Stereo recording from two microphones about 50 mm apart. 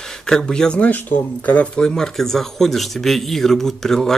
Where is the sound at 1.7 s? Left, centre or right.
Centre.